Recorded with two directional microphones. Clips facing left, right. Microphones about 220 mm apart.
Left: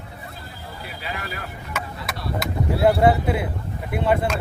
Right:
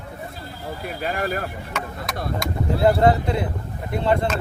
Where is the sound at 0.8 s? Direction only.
50° right (ahead or behind).